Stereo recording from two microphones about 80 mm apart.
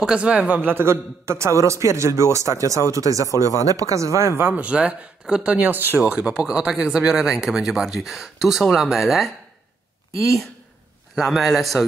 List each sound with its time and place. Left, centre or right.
0.0 s a man's voice: centre; by 4.3 s right
4.4 s speech: right
5.9 s speech: centre
11.1 s a man's voice: centre